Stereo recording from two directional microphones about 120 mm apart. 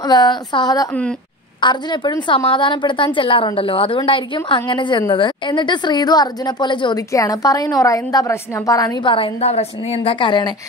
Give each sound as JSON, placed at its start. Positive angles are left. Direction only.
{"t": 0.0, "sound": "a woman's voice", "side_deg": 35}
{"t": 7.0, "sound": "a woman's voice", "side_deg": 30}
{"t": 10.1, "sound": "a woman's voice", "side_deg": 40}